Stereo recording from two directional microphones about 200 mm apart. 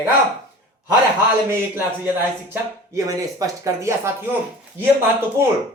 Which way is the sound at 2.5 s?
15° right (ahead or behind).